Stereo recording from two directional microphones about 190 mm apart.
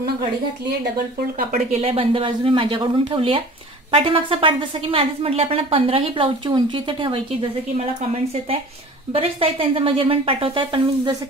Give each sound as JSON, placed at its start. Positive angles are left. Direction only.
{"t": 1.5, "sound": "a woman's voice", "side_deg": -35}
{"t": 9.1, "sound": "a woman's voice", "side_deg": -30}